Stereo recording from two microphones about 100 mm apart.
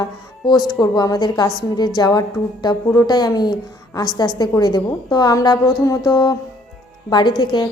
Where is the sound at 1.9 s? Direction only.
40° left (ahead or behind).